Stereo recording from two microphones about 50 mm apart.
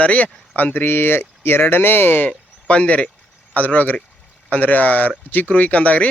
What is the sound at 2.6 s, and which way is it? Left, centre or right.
Speech, left.